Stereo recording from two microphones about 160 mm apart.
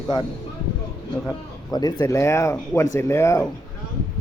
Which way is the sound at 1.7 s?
25° left (ahead or behind).